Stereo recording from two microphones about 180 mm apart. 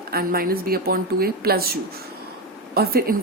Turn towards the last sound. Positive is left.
turn(degrees=-60)  # may be behind; listen again after turning